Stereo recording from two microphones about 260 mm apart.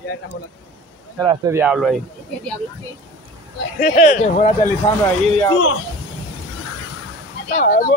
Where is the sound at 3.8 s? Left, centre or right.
Left.